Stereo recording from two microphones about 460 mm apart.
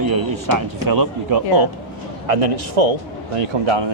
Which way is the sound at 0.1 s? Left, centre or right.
Right.